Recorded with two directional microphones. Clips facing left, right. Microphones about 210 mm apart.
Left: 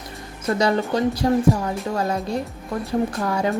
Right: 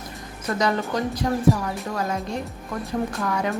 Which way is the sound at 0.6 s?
30° left (ahead or behind).